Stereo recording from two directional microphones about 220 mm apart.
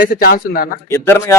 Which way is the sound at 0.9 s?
10° left (ahead or behind).